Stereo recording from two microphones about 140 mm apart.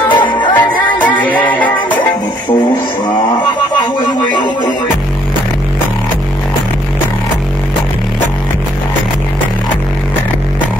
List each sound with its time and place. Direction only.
0.1 s music: 35° left (ahead or behind)
1.0 s music: 10° left (ahead or behind)